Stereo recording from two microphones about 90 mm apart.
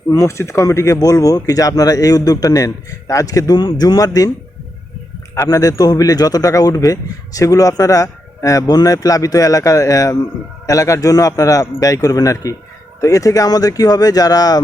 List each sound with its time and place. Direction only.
0.1 s speech: 35° left (ahead or behind)
5.5 s a man's voice: 40° left (ahead or behind)